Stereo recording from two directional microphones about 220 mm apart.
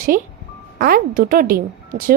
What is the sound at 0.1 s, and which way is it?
A woman's voice, 40° right (ahead or behind).